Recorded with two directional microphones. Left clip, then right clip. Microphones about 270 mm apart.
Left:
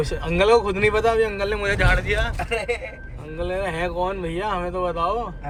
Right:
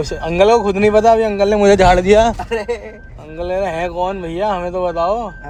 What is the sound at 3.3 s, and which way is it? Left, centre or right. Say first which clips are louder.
Speech: right 7 dB; centre.